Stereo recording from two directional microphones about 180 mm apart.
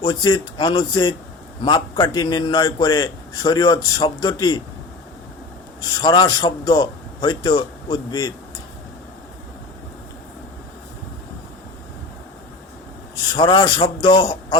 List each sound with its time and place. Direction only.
0.0 s a man's voice: 25° left (ahead or behind)
5.8 s a man's voice: 25° left (ahead or behind)
13.3 s a man's voice: 25° left (ahead or behind)